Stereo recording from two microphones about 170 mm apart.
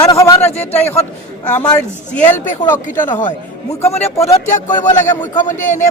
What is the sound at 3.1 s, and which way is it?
Speech, 50° left (ahead or behind).